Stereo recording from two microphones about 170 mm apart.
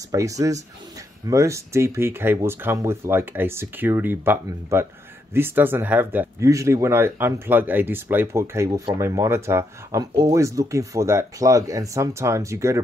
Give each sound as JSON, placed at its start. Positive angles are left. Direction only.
{"t": 0.1, "sound": "speech", "side_deg": -20}